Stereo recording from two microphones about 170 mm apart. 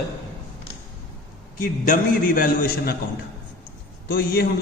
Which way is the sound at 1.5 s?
50° left (ahead or behind).